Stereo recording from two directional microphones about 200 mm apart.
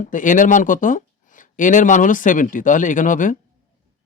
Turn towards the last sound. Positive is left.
turn(degrees=40)  # may be behind; listen again after turning